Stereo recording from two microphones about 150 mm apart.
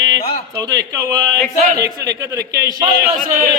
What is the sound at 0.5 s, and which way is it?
Speech, 25° right (ahead or behind).